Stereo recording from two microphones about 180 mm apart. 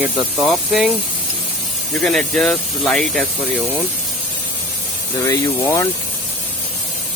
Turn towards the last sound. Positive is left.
turn(degrees=15)  # may be behind; listen again after turning